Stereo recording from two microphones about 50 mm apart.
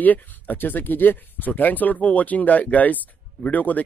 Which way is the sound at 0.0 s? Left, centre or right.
Left.